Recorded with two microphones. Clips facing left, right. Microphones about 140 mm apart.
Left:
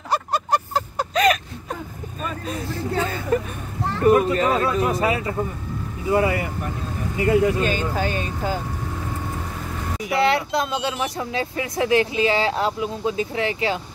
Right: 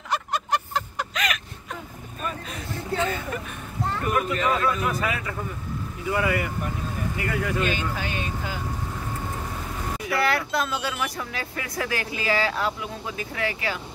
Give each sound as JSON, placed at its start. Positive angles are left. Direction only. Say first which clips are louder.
{"t": 0.1, "sound": "a sound", "louder": "left 4 dB", "side_deg": 35}
{"t": 2.4, "sound": "vehicle", "louder": "left 6 dB", "side_deg": 35}
{"t": 4.0, "sound": "speech", "louder": "left 9 dB", "side_deg": 35}
{"t": 7.6, "sound": "speech", "louder": "left 5 dB", "side_deg": 40}
{"t": 10.0, "sound": "speech", "louder": "left 5 dB", "side_deg": 25}